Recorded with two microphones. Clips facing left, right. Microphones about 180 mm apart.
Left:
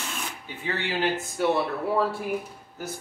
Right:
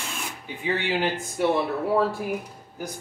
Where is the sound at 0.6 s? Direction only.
15° right (ahead or behind).